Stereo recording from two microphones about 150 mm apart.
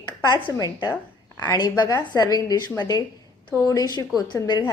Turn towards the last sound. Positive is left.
turn(degrees=25)  # may be behind; listen again after turning